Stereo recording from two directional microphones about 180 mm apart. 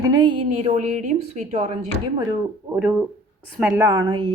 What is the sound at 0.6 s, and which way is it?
Speech, 40° right (ahead or behind).